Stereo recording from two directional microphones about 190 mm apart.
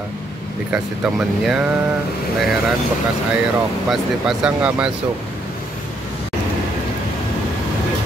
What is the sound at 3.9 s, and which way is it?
Speech, 5° right (ahead or behind).